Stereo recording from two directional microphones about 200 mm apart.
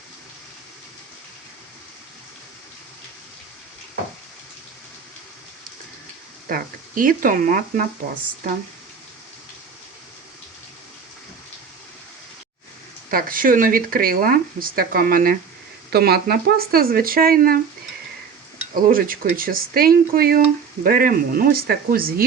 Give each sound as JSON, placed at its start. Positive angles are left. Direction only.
{"t": 6.5, "sound": "speech", "side_deg": -45}
{"t": 13.1, "sound": "speech", "side_deg": -45}
{"t": 18.9, "sound": "speech", "side_deg": -45}